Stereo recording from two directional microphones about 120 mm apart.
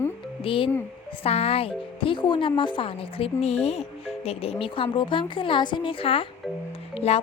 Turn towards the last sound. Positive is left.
turn(degrees=60)  # may be behind; listen again after turning